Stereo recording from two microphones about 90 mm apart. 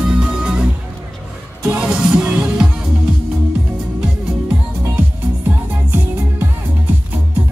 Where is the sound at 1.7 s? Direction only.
10° right (ahead or behind).